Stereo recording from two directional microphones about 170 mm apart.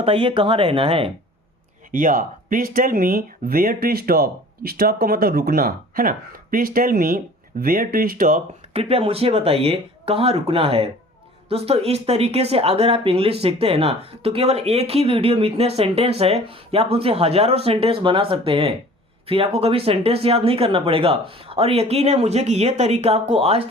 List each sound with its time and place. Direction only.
0.0 s speech: 30° right (ahead or behind)
1.9 s speech: 55° right (ahead or behind)
8.7 s speech: 35° right (ahead or behind)